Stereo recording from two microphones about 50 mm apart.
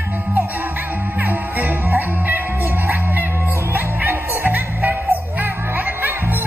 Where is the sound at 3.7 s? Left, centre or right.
Right.